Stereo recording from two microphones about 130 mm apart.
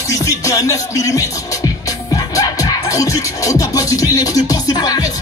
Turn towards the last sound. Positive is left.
turn(degrees=30)  # may be behind; listen again after turning